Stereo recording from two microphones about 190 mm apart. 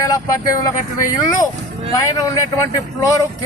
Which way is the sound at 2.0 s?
15° left (ahead or behind).